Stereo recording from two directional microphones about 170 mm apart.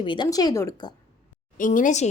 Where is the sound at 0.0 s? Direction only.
25° left (ahead or behind).